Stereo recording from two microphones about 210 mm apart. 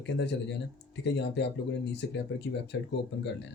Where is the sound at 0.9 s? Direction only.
55° left (ahead or behind).